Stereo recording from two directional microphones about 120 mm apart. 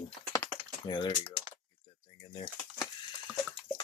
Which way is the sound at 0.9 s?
40° left (ahead or behind).